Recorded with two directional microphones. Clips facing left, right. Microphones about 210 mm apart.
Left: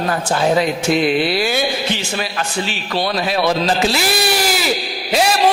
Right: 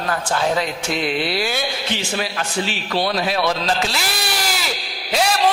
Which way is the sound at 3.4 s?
5° left (ahead or behind).